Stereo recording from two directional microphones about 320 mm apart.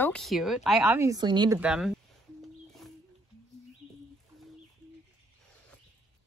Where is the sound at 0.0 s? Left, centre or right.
Centre.